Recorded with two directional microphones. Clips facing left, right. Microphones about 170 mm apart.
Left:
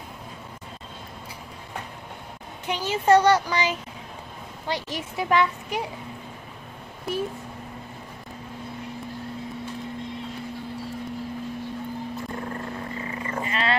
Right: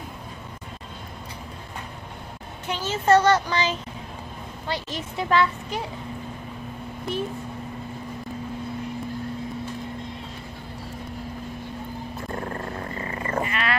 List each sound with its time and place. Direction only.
2.6 s a child's voice: 15° left (ahead or behind)
13.0 s sheep: 55° right (ahead or behind)
13.4 s wild animals: 30° left (ahead or behind)